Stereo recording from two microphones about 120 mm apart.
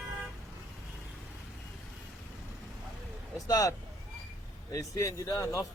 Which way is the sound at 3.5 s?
30° left (ahead or behind).